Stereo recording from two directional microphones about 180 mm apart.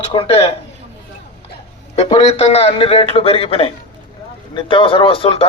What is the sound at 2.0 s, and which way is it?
A man's voice, 30° left (ahead or behind).